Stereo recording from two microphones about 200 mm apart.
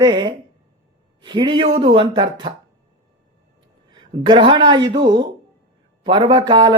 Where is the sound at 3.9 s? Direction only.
25° right (ahead or behind).